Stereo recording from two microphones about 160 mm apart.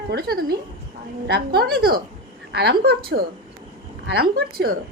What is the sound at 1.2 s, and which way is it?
Speech, 90° right.